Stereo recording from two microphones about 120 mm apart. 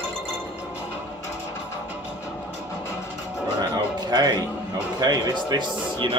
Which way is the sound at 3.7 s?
35° right (ahead or behind).